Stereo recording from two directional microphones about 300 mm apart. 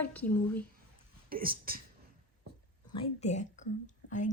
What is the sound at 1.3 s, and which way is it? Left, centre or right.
Speech, right.